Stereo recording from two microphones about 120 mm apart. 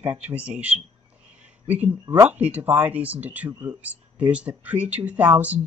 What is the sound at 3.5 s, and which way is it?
Speech, 30° right (ahead or behind).